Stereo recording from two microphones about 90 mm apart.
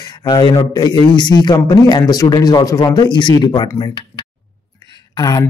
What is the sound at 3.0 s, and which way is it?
Speech, 60° left (ahead or behind).